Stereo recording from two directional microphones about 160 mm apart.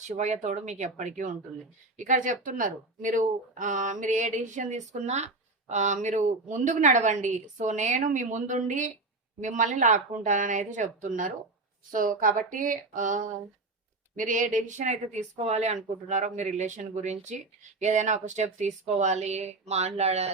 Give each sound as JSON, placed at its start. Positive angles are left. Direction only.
{"t": 0.1, "sound": "speech", "side_deg": -45}
{"t": 11.9, "sound": "a sound", "side_deg": -60}
{"t": 14.2, "sound": "speech", "side_deg": -50}